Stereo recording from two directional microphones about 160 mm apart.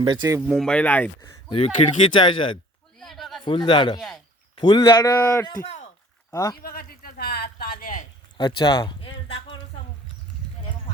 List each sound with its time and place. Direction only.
0.0 s speech: 25° right (ahead or behind)
0.5 s speech: 5° left (ahead or behind)
1.2 s speech: 30° left (ahead or behind)
3.0 s a sound: centre (ahead or behind)
3.4 s speech: 30° left (ahead or behind)
6.6 s speech: 65° left (ahead or behind)
8.4 s a sound: 30° left (ahead or behind)